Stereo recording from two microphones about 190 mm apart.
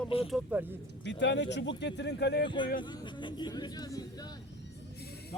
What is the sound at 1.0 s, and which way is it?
Speech, 70° left (ahead or behind).